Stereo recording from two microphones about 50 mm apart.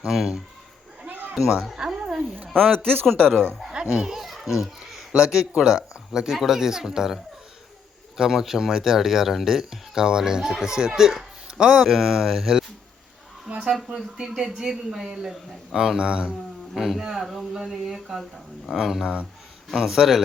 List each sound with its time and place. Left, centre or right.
0.1 s a man's voice: centre
1.0 s a sound: right
1.3 s a sound: centre
3.1 s speech: centre
3.7 s a child's voice: centre
8.2 s a man's voice: centre
16.7 s a man's voice: centre
19.0 s speech: right
19.7 s a man's voice: centre